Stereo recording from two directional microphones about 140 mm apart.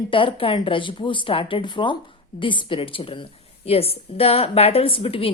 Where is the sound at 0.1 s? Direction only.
40° left (ahead or behind).